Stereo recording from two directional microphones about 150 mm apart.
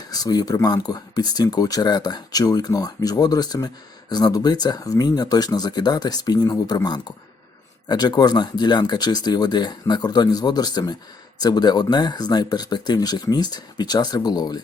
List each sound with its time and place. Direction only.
0.1 s speech: 25° left (ahead or behind)